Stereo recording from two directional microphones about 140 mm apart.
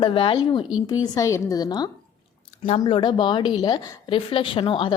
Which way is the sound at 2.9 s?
35° left (ahead or behind).